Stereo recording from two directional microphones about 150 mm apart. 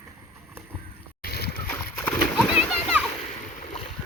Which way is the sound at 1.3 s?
90° left.